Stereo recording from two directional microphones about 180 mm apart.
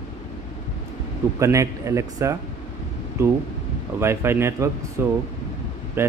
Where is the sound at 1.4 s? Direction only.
15° right (ahead or behind).